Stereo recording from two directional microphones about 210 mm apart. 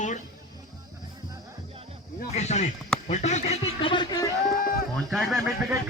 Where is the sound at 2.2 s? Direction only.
35° left (ahead or behind).